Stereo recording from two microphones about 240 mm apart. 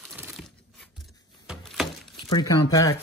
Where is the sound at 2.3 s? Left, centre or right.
Centre.